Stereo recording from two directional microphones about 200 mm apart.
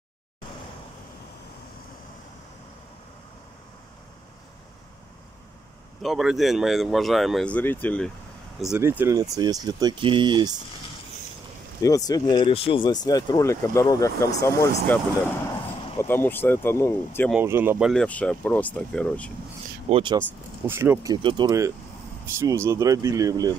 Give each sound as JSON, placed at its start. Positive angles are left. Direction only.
{"t": 6.0, "sound": "speech", "side_deg": 0}
{"t": 11.8, "sound": "speech", "side_deg": 15}
{"t": 16.0, "sound": "speech", "side_deg": 10}
{"t": 17.3, "sound": "speech", "side_deg": -10}
{"t": 19.9, "sound": "speech", "side_deg": -25}
{"t": 20.6, "sound": "speech", "side_deg": -10}